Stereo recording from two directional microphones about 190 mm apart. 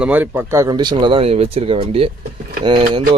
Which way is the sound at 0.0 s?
10° right (ahead or behind).